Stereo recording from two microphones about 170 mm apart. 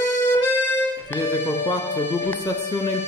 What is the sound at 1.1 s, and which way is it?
Speech, 10° left (ahead or behind).